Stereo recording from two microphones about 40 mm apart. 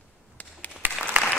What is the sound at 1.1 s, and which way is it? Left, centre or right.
Applause, right.